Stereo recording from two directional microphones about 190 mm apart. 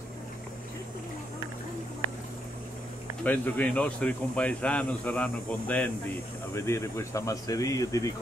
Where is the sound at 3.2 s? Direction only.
10° left (ahead or behind).